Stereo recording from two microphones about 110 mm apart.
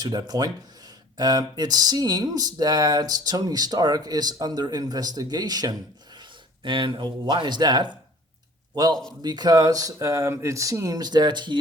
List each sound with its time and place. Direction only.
0.0 s speech: 35° right (ahead or behind)
6.6 s a man's voice: 50° right (ahead or behind)